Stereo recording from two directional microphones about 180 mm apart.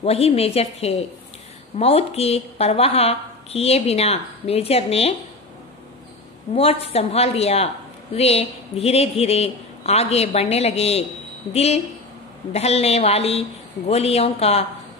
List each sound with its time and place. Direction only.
0.0 s a woman's voice: 35° left (ahead or behind)
6.5 s a woman's voice: 35° left (ahead or behind)